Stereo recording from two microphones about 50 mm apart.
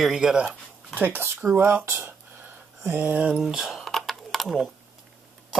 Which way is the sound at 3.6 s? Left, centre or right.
Centre.